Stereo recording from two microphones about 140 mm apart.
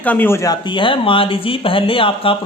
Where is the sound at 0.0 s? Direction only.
10° left (ahead or behind).